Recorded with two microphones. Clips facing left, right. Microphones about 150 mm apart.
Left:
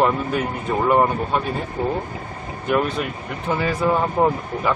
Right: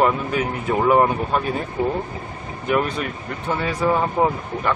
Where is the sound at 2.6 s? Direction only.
Centre (ahead or behind).